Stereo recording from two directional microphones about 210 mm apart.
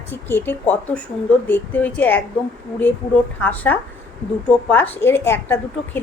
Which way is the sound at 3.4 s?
10° left (ahead or behind).